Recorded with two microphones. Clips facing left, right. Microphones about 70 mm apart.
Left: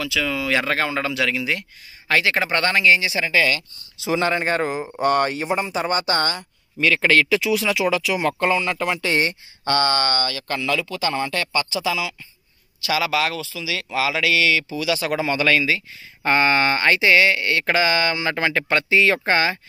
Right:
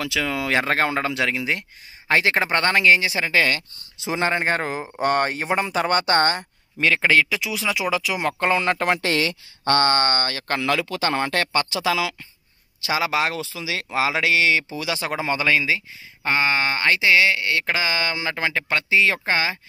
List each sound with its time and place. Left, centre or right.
0.0 s speech: right
5.5 s speech: right
7.0 s speech: centre
8.0 s speech: right
8.5 s speech: right
9.1 s speech: right
9.7 s speech: right
12.8 s speech: right; by 15.8 s centre
16.3 s speech: centre